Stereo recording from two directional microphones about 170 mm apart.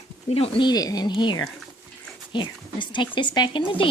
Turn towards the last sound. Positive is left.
turn(degrees=30)  # may be behind; listen again after turning